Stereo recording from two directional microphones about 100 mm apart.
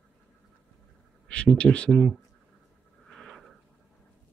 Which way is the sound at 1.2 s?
10° left (ahead or behind).